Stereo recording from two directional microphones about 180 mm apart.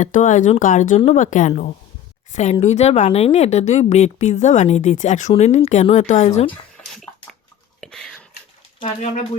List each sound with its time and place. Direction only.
0.0 s a woman's voice: 45° left (ahead or behind)
7.8 s whispering: 5° left (ahead or behind)
8.8 s a woman's voice: 40° left (ahead or behind)